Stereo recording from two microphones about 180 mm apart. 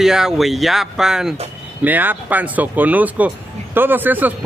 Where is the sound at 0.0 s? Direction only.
Centre (ahead or behind).